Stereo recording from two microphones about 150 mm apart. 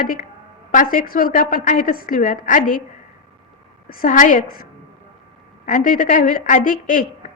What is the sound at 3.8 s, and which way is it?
A woman's voice, 65° left (ahead or behind).